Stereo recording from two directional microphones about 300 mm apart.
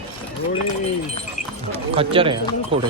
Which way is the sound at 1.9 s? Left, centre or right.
Centre.